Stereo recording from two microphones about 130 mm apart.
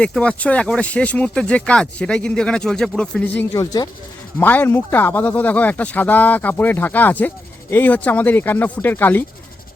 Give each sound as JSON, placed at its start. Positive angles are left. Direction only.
{"t": 0.0, "sound": "speech", "side_deg": 10}
{"t": 3.5, "sound": "speech", "side_deg": 30}
{"t": 4.4, "sound": "speech", "side_deg": 15}